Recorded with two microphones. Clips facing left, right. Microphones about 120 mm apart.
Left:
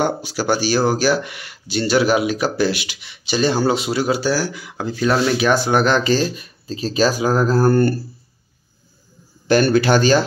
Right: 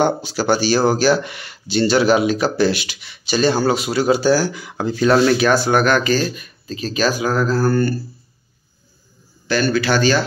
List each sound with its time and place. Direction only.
0.0 s speech: 10° left (ahead or behind)
4.0 s speech: 5° left (ahead or behind); by 8.0 s 55° left (ahead or behind)
9.5 s speech: 50° left (ahead or behind)